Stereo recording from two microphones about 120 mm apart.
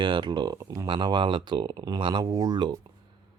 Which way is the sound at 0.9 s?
40° right (ahead or behind).